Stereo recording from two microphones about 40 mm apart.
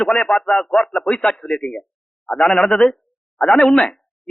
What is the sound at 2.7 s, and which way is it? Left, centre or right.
A man's voice, centre.